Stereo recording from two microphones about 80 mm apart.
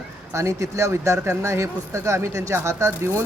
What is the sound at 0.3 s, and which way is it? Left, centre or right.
Speech, right.